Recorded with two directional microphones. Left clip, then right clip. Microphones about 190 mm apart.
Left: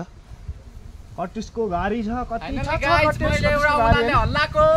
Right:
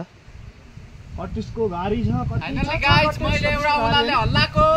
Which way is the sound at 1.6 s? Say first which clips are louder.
Even; 45° left (ahead or behind).